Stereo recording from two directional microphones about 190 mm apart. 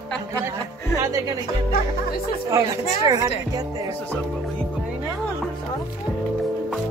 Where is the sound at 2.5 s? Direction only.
20° right (ahead or behind).